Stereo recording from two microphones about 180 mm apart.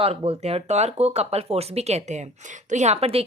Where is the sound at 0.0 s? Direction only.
35° right (ahead or behind).